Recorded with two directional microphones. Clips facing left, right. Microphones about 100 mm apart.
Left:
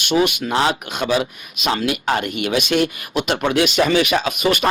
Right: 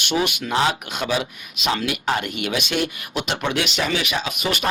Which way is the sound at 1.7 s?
35° left (ahead or behind).